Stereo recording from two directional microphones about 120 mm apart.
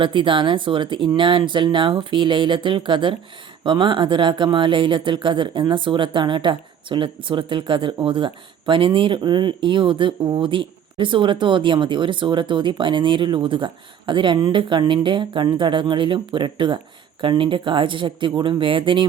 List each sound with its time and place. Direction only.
0.0 s speech: 45° right (ahead or behind)